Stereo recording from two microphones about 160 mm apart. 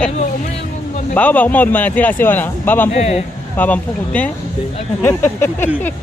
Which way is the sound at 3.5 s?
10° left (ahead or behind).